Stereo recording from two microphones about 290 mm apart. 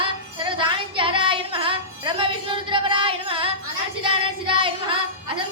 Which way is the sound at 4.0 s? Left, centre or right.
Centre.